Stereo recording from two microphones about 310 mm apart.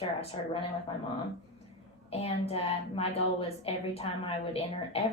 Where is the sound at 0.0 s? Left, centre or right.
Centre.